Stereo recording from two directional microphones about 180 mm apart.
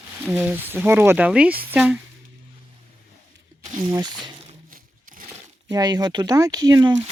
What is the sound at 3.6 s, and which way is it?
Speech, 25° right (ahead or behind).